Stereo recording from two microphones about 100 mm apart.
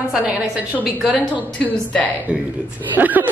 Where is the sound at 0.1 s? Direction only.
10° right (ahead or behind).